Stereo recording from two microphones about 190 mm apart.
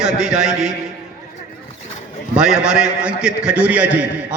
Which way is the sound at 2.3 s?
5° right (ahead or behind).